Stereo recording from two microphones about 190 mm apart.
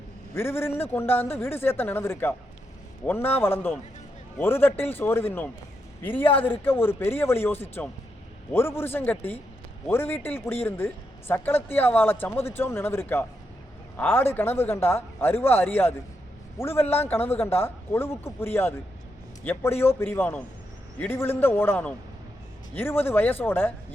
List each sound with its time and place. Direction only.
0.3 s speech: 10° left (ahead or behind)
6.2 s speech: 30° left (ahead or behind)
6.5 s speech: 10° left (ahead or behind)